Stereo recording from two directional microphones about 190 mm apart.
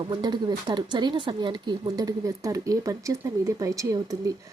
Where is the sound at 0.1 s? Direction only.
20° right (ahead or behind).